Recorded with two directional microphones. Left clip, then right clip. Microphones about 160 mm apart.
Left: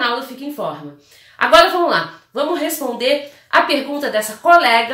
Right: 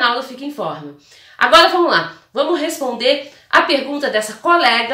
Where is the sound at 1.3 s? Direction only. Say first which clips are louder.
Right 1 dB; 15° right (ahead or behind).